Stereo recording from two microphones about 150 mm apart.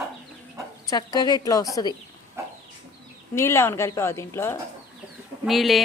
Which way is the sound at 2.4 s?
20° right (ahead or behind).